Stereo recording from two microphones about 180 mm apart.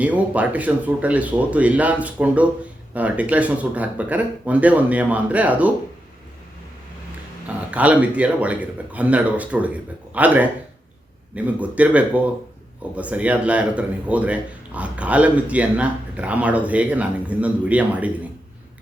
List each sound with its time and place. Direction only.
0.0 s speech: 10° right (ahead or behind)
7.4 s speech: 10° right (ahead or behind)